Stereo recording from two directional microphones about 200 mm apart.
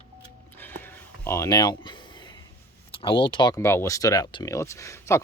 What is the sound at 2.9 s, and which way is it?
Speech, 25° left (ahead or behind).